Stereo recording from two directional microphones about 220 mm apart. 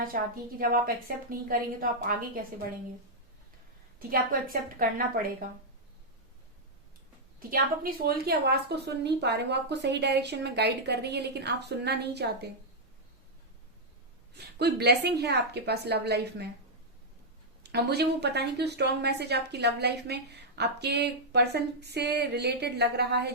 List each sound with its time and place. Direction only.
0.1 s a woman's voice: 40° right (ahead or behind)
4.1 s a woman's voice: 40° right (ahead or behind)
7.3 s a woman's voice: 40° right (ahead or behind)
14.3 s a woman's voice: 50° right (ahead or behind)
17.6 s a woman's voice: 50° right (ahead or behind)